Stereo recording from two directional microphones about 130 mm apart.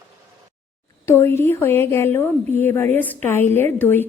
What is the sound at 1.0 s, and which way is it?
A woman's voice, 20° left (ahead or behind).